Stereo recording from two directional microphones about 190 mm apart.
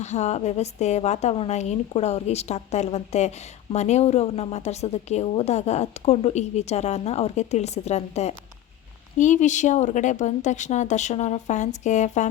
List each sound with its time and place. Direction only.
0.0 s a woman's voice: 35° left (ahead or behind)